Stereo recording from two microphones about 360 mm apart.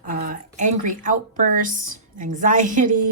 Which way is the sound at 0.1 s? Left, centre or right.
Right.